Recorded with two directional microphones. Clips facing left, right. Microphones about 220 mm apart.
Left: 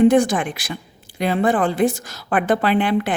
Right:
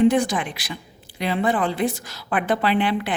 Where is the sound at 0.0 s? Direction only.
50° left (ahead or behind).